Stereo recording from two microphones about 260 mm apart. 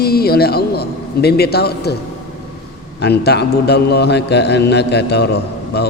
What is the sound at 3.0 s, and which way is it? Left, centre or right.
A woman's voice, left.